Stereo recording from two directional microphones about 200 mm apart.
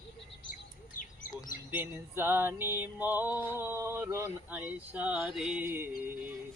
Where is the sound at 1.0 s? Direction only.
45° left (ahead or behind).